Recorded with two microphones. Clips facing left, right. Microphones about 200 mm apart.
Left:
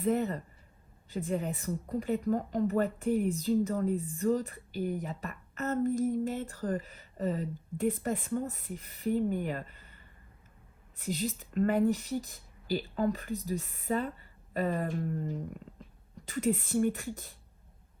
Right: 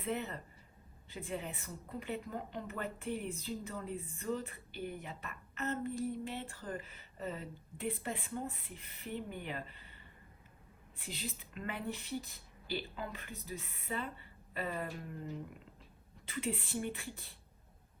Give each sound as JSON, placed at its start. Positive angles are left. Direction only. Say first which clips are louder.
{"t": 0.0, "sound": "a woman's voice", "louder": "left 9 dB", "side_deg": 35}
{"t": 16.3, "sound": "speech", "louder": "left 9 dB", "side_deg": 40}